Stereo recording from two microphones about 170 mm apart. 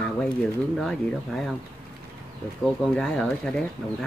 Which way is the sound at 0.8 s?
Centre (ahead or behind).